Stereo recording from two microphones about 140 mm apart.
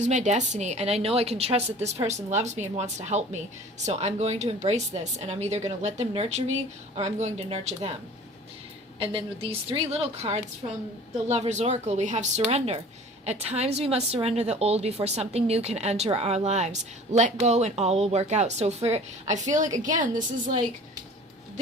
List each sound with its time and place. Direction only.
0.0 s a woman's voice: 55° right (ahead or behind)
9.0 s a woman's voice: 40° right (ahead or behind); by 20.7 s 65° right (ahead or behind)